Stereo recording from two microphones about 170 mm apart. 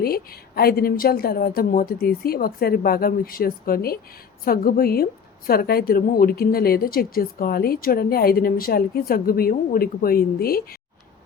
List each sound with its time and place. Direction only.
0.0 s a woman's voice: 65° left (ahead or behind)